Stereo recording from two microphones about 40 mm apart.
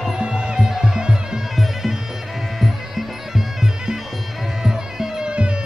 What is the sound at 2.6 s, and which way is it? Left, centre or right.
Music, centre.